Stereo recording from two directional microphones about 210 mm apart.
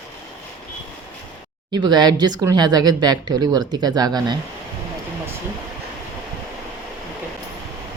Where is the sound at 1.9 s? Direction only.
20° right (ahead or behind).